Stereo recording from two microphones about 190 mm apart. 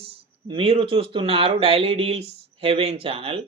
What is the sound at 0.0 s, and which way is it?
Speech, 30° right (ahead or behind).